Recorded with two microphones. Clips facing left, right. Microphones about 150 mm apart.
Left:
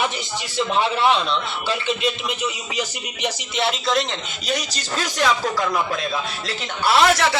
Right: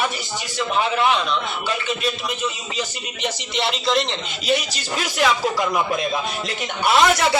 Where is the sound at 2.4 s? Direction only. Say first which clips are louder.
Left 1 dB; 10° left (ahead or behind); by 7.4 s 20° right (ahead or behind).